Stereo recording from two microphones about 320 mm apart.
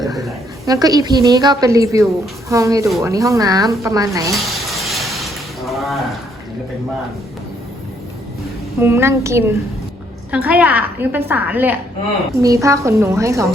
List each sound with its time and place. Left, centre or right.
0.3 s a woman's voice: centre
4.4 s a sound: centre
8.8 s a woman's voice: centre